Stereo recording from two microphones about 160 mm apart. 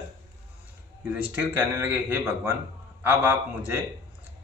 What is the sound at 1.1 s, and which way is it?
A man's voice, 10° right (ahead or behind).